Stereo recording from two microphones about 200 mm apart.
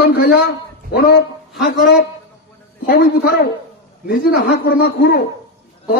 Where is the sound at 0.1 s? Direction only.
55° left (ahead or behind).